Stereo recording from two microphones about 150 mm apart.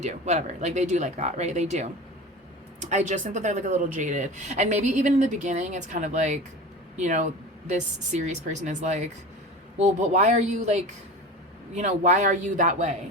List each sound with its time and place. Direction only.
0.0 s speech: 50° right (ahead or behind)
2.9 s a man's voice: 55° right (ahead or behind)